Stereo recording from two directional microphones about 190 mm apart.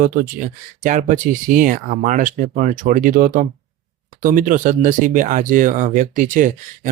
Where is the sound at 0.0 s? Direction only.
45° right (ahead or behind).